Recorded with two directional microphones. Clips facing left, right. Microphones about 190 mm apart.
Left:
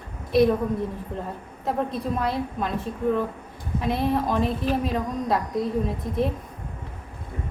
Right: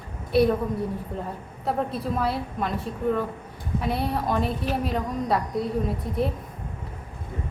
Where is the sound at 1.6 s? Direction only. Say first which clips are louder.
Left 1 dB; 5° right (ahead or behind).